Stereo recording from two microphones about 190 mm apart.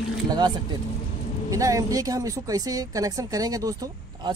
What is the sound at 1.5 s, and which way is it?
Speech, 15° right (ahead or behind).